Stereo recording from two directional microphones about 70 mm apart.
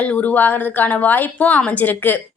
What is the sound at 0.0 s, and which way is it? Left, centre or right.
A woman's voice, left.